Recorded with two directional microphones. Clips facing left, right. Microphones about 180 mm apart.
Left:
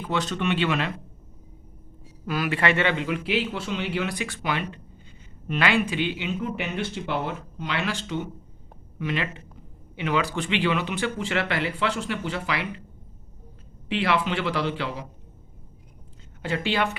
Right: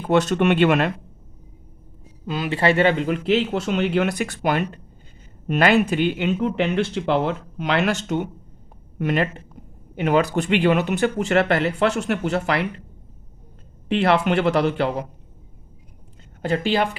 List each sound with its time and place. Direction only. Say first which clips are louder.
0.0 s speech: right 9 dB; 45° right (ahead or behind)
2.2 s speech: right 4 dB; 25° right (ahead or behind); by 12.6 s 50° right (ahead or behind)
13.9 s speech: right 6 dB; 55° right (ahead or behind)
16.4 s speech: right 5 dB; 40° right (ahead or behind)